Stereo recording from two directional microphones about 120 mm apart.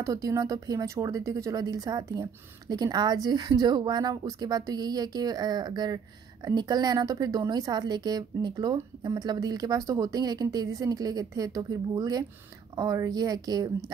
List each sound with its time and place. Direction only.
0.0 s speech: 25° right (ahead or behind)